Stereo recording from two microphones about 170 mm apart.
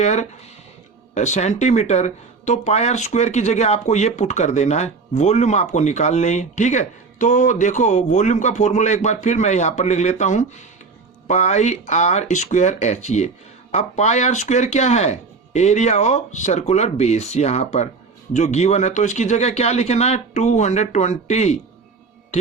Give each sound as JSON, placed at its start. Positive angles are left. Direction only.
{"t": 0.0, "sound": "speech", "side_deg": 40}